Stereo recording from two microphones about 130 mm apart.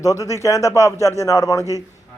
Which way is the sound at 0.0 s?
25° left (ahead or behind).